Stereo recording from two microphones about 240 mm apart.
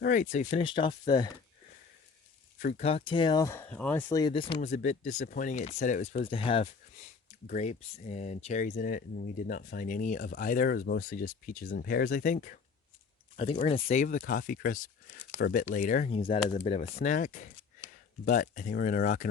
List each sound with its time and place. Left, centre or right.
0.0 s speech: left; by 1.3 s centre
2.6 s speech: left
15.7 s speech: left
17.8 s a sound: centre
18.3 s speech: left